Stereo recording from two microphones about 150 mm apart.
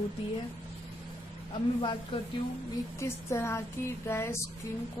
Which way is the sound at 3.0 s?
20° left (ahead or behind).